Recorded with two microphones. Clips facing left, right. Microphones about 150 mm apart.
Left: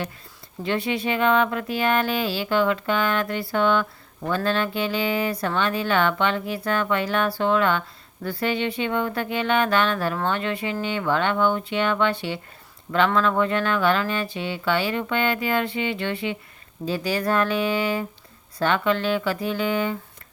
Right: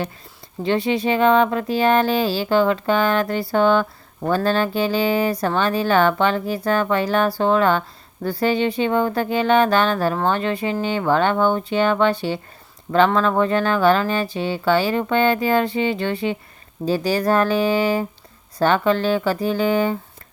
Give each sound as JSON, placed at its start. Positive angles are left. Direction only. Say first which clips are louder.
{"t": 0.6, "sound": "speech", "louder": "right 5 dB", "side_deg": -30}